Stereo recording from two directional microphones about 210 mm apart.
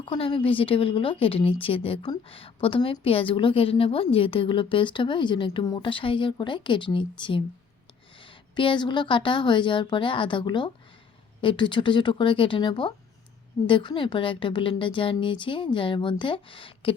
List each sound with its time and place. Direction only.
0.0 s a woman's voice: 25° left (ahead or behind)